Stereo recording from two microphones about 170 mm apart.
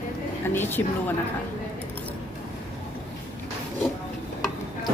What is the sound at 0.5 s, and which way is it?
Speech, 10° left (ahead or behind).